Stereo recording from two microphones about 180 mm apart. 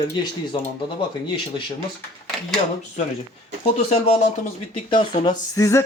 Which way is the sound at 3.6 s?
35° left (ahead or behind).